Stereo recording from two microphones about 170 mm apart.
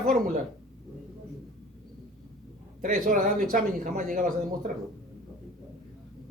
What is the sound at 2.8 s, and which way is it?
A man's voice, 55° right (ahead or behind).